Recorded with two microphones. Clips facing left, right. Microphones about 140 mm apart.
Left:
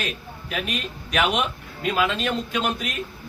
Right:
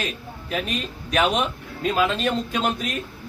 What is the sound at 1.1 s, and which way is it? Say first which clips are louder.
A man's voice: right 2 dB; 35° right (ahead or behind).